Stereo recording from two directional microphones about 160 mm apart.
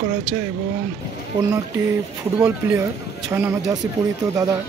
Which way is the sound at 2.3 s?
10° right (ahead or behind).